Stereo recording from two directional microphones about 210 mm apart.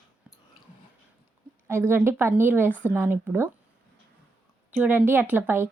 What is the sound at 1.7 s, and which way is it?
A woman's voice, 10° right (ahead or behind).